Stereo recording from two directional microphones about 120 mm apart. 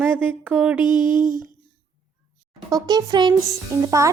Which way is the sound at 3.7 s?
25° right (ahead or behind).